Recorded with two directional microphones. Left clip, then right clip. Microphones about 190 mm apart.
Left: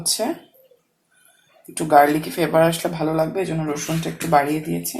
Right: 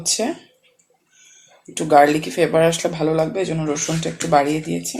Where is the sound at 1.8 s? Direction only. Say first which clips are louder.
Right 1 dB; 30° right (ahead or behind).